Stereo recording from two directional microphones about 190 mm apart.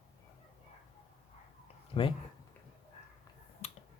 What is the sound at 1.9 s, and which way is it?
Speech, 30° left (ahead or behind).